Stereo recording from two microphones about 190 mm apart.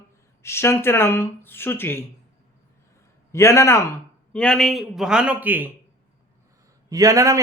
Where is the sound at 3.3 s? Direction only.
15° left (ahead or behind); by 5.7 s 10° right (ahead or behind).